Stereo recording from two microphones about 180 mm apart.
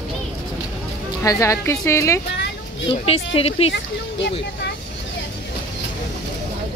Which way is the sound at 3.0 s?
30° left (ahead or behind).